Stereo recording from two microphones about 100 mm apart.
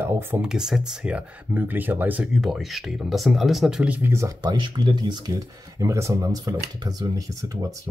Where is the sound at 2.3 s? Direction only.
Centre (ahead or behind).